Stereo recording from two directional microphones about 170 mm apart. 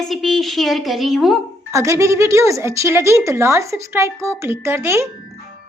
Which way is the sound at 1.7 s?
15° right (ahead or behind).